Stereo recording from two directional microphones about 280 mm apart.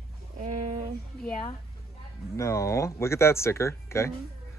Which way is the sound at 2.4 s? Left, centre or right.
Centre.